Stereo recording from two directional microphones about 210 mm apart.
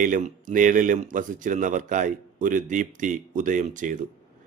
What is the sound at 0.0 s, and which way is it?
A man's voice, 40° right (ahead or behind).